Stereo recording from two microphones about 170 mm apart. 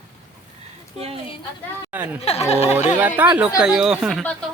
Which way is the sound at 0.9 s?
35° right (ahead or behind).